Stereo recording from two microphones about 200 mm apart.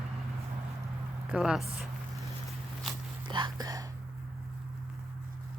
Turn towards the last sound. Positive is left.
turn(degrees=-20)  # may be behind; listen again after turning